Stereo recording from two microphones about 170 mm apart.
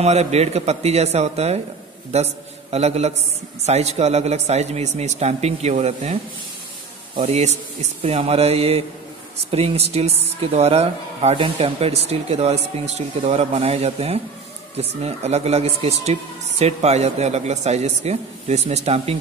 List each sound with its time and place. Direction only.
0.0 s speech: 40° right (ahead or behind)
7.2 s speech: 40° right (ahead or behind)